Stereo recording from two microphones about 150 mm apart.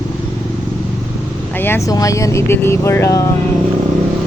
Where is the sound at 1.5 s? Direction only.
15° left (ahead or behind).